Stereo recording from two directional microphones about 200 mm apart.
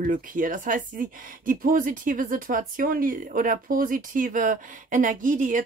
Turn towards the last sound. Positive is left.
turn(degrees=-40)  # may be behind; listen again after turning